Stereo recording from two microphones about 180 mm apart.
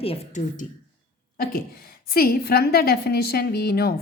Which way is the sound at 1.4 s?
55° left (ahead or behind).